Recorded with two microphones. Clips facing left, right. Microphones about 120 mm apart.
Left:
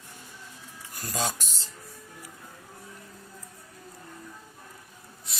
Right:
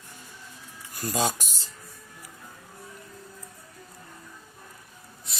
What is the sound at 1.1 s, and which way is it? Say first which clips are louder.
Speech: right 4 dB; 15° right (ahead or behind).